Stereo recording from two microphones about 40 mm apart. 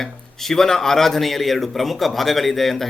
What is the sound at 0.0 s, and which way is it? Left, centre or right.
Speech, centre.